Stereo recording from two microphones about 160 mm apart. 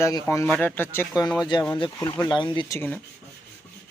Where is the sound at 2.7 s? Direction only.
10° left (ahead or behind).